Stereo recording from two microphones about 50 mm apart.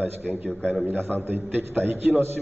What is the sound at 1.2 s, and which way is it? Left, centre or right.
A man's voice, right.